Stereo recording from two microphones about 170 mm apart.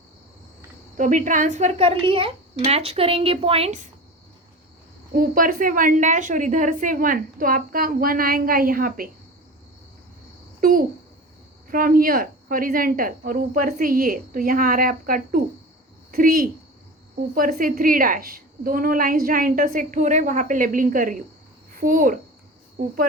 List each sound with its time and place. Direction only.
0.9 s a woman's voice: 50° right (ahead or behind)
5.1 s a woman's voice: 55° right (ahead or behind)
10.6 s a child's voice: 55° right (ahead or behind)